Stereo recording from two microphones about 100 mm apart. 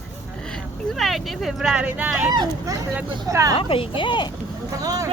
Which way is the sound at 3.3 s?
30° right (ahead or behind).